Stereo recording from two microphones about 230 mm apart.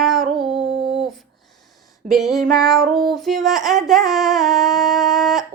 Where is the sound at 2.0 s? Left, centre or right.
Centre.